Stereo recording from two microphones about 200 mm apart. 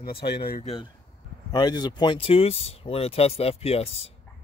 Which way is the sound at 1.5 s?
20° left (ahead or behind).